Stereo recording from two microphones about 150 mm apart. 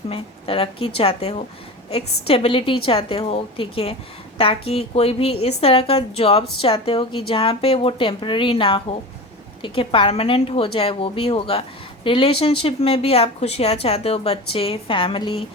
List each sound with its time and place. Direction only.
0.1 s speech: 40° left (ahead or behind)